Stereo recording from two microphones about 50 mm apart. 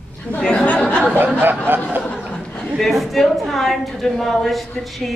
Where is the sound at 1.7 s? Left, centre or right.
Right.